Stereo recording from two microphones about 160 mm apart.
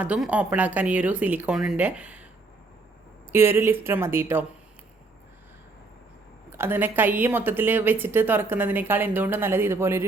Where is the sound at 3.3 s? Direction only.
15° right (ahead or behind).